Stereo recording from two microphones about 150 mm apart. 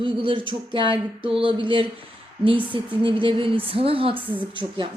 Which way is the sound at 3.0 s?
35° right (ahead or behind).